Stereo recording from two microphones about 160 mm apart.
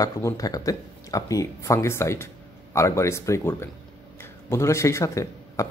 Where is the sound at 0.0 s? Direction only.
20° left (ahead or behind).